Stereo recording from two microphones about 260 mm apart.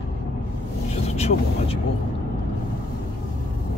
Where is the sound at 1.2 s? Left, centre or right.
Left.